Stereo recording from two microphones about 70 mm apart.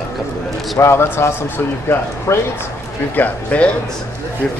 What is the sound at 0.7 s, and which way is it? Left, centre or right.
Speech, left.